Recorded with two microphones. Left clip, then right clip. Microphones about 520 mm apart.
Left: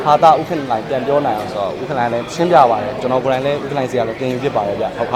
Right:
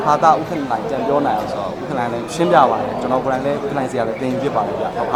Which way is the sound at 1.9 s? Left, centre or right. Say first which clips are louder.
Left 3 dB; left.